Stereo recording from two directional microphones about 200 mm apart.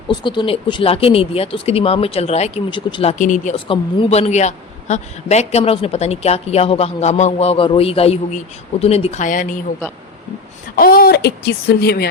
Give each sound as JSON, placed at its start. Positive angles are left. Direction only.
{"t": 0.1, "sound": "speech", "side_deg": 25}
{"t": 10.8, "sound": "speech", "side_deg": 45}